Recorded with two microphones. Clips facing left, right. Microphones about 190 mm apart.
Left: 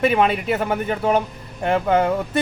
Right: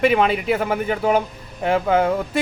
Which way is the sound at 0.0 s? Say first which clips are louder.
Right 1 dB; centre (ahead or behind).